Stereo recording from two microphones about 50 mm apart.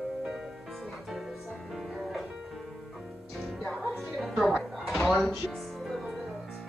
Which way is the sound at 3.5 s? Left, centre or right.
Centre.